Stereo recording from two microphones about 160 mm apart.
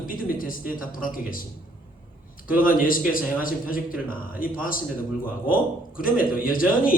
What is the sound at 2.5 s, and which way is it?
Speech, 60° left (ahead or behind).